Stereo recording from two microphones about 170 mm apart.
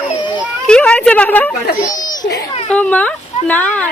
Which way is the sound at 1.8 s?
20° left (ahead or behind).